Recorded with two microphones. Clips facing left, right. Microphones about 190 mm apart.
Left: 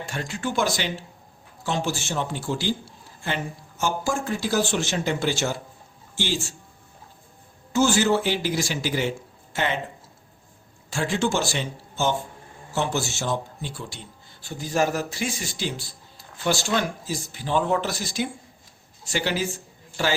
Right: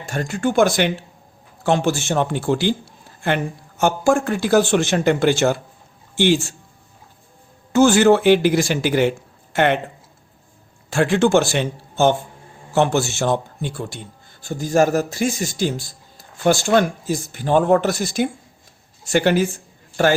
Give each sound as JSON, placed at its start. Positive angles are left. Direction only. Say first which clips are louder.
{"t": 0.1, "sound": "a man's voice", "louder": "right 9 dB", "side_deg": -50}
{"t": 7.7, "sound": "speech", "louder": "right 7 dB", "side_deg": -60}
{"t": 10.8, "sound": "a man's voice", "louder": "right 8 dB", "side_deg": -65}